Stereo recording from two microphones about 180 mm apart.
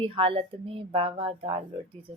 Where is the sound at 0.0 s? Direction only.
30° right (ahead or behind).